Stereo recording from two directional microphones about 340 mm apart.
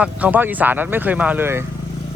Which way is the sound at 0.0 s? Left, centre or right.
Centre.